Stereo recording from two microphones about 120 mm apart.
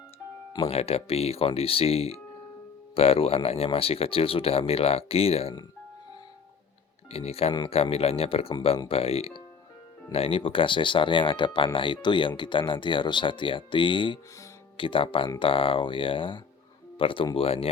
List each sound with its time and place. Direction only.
0.6 s speech: 55° left (ahead or behind)
7.1 s speech: 55° left (ahead or behind)